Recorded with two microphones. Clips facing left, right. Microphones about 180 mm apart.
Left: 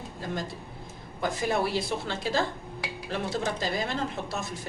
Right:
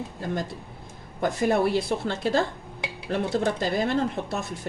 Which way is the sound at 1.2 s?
55° right (ahead or behind).